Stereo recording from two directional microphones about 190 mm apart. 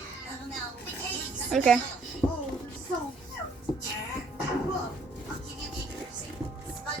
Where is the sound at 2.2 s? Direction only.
5° left (ahead or behind).